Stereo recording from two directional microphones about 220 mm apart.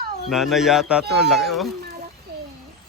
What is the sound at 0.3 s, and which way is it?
Speech, centre (ahead or behind).